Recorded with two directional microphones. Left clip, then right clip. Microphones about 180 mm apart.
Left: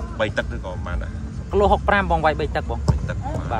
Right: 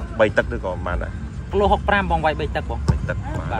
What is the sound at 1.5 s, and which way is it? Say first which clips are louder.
Speech: left 1 dB; 25° left (ahead or behind).